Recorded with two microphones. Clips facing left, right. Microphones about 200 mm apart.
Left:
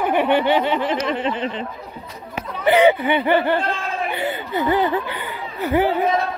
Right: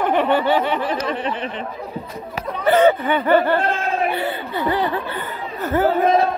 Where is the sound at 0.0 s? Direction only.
10° left (ahead or behind); by 1.7 s 30° left (ahead or behind).